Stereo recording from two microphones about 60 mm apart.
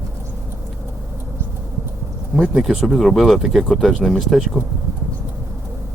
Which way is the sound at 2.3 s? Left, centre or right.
Centre.